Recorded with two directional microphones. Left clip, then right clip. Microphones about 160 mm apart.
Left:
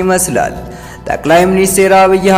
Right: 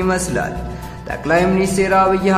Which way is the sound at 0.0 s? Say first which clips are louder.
Left 7 dB; 35° left (ahead or behind).